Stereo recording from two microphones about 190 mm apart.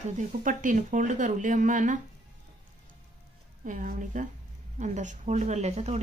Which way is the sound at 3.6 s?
40° right (ahead or behind).